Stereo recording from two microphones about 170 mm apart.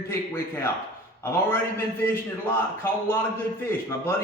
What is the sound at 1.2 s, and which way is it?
Speech, 15° left (ahead or behind).